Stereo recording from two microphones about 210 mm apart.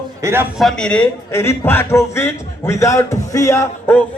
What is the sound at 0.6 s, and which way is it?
A man's voice, 5° left (ahead or behind).